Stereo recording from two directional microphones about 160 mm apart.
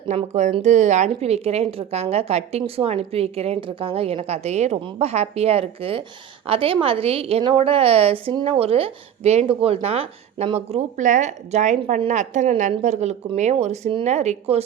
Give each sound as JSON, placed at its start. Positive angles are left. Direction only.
{"t": 0.1, "sound": "a woman's voice", "side_deg": -45}